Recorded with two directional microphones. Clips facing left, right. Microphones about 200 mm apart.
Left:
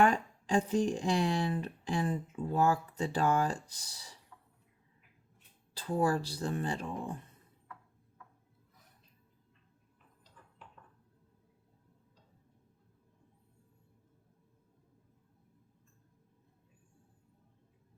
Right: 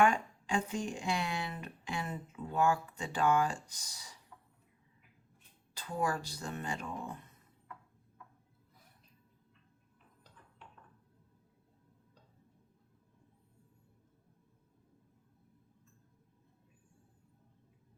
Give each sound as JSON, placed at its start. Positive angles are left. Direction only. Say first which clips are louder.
{"t": 0.0, "sound": "speech", "louder": "left 1 dB", "side_deg": 35}
{"t": 5.7, "sound": "speech", "louder": "left 5 dB", "side_deg": 35}